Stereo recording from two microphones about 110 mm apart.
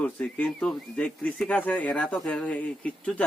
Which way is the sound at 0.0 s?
15° left (ahead or behind).